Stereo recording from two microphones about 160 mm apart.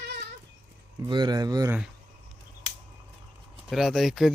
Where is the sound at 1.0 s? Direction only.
25° right (ahead or behind).